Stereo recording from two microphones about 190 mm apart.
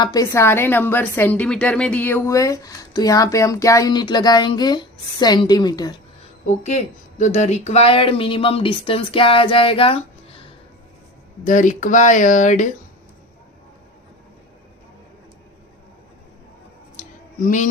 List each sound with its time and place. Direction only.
0.0 s a woman's voice: 20° left (ahead or behind)
6.5 s speech: 35° left (ahead or behind)
11.4 s speech: 40° left (ahead or behind)
17.0 s a sound: 40° left (ahead or behind)